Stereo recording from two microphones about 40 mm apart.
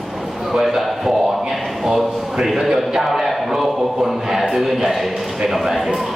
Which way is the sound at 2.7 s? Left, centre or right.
Centre.